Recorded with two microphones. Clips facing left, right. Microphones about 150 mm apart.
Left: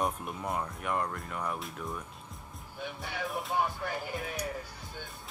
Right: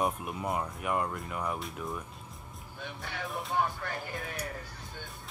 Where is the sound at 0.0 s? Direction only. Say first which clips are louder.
Right 1 dB; 5° right (ahead or behind).